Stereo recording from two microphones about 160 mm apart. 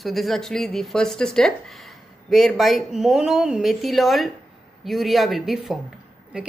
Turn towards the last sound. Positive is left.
turn(degrees=0)  # may be behind; listen again after turning